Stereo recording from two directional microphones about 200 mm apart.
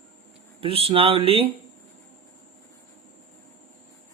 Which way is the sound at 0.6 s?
30° right (ahead or behind).